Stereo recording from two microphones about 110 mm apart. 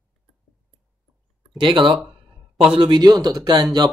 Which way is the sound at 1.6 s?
50° right (ahead or behind).